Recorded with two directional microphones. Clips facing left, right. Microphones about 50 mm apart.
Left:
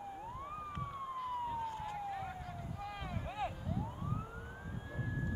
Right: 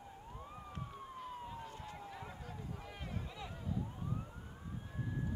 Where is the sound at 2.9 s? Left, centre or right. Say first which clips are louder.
Left 4 dB; left.